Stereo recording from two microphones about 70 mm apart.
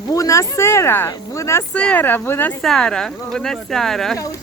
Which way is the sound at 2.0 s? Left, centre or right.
Left.